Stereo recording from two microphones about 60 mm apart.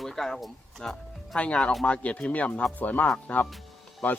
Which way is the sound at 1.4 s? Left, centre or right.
Centre.